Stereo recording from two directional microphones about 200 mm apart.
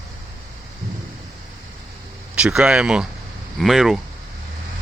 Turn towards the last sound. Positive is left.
turn(degrees=0)  # may be behind; listen again after turning